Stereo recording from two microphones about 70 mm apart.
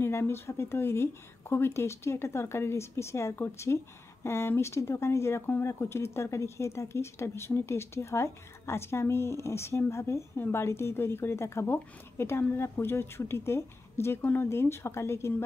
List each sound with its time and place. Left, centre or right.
0.0 s speech: left